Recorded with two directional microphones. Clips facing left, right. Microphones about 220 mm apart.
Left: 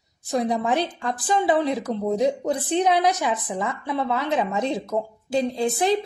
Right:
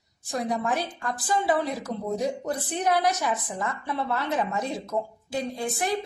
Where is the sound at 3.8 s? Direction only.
20° left (ahead or behind).